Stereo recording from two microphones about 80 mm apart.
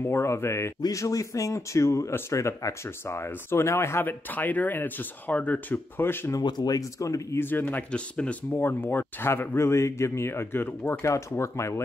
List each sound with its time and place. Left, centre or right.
0.0 s speech: left
6.4 s speech: left
7.3 s speech: left
7.9 s speech: centre
8.5 s speech: left